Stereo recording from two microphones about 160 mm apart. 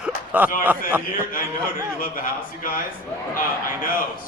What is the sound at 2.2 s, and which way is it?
Speech, 60° left (ahead or behind).